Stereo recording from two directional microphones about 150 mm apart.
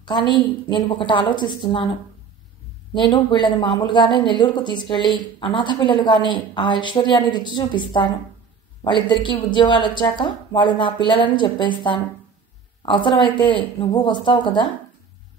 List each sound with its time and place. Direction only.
0.0 s speech: 30° left (ahead or behind)
2.9 s speech: 30° left (ahead or behind)